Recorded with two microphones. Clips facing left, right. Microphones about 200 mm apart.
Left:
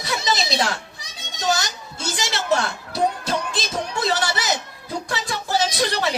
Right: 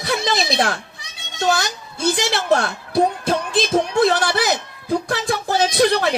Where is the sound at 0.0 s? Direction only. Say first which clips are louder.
Right 3 dB; 55° right (ahead or behind).